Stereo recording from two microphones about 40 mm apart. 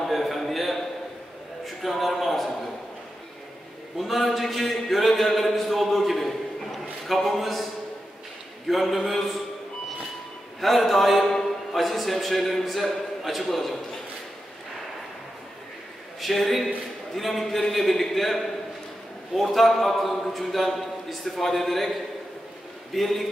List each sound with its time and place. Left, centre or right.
0.0 s a sound: centre
4.0 s a sound: centre
8.6 s speech: centre
10.6 s speech: centre
16.2 s speech: centre
22.9 s speech: centre